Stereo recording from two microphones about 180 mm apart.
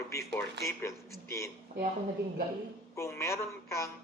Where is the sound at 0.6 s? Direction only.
70° right (ahead or behind).